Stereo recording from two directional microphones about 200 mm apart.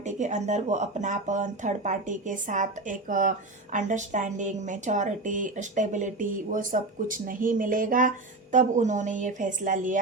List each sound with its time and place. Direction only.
0.0 s speech: 35° right (ahead or behind)